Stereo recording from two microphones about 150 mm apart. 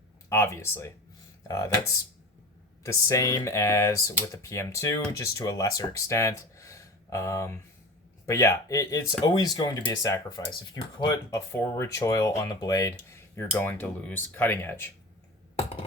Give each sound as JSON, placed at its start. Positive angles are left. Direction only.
{"t": 0.3, "sound": "speech", "side_deg": 20}